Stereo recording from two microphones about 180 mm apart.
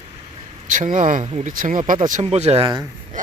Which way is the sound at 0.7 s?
50° right (ahead or behind).